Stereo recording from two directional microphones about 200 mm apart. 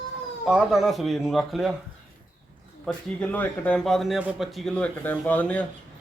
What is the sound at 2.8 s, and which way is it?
A man's voice, 5° left (ahead or behind).